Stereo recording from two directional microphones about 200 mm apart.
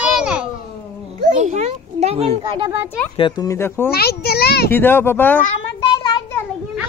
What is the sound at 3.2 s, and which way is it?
Speech, 15° left (ahead or behind).